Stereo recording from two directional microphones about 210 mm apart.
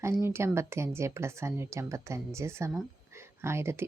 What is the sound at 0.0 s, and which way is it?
A woman's voice, 10° right (ahead or behind).